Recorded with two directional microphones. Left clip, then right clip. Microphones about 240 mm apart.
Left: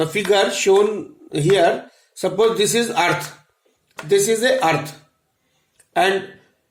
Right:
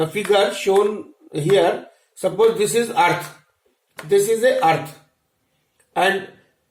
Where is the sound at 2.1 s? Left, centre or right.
Left.